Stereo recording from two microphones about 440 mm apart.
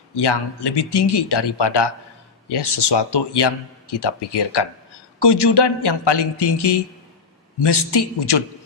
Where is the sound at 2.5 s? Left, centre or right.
Left.